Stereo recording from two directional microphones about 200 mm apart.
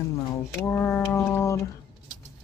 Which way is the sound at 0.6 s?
10° left (ahead or behind).